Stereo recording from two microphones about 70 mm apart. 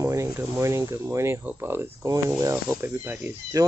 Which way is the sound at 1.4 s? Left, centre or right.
Right.